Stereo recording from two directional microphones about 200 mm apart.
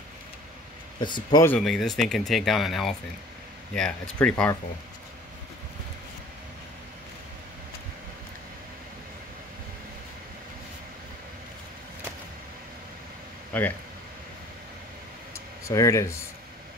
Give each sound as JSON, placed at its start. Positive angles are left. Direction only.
{"t": 0.9, "sound": "a man's voice", "side_deg": 25}
{"t": 1.4, "sound": "speech", "side_deg": 5}
{"t": 13.5, "sound": "speech", "side_deg": 10}
{"t": 15.7, "sound": "speech", "side_deg": 15}